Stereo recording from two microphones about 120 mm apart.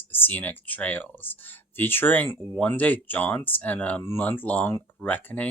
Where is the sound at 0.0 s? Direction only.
15° left (ahead or behind).